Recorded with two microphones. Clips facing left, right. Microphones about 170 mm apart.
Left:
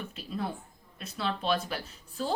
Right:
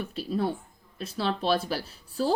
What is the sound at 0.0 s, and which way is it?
Speech, 35° right (ahead or behind).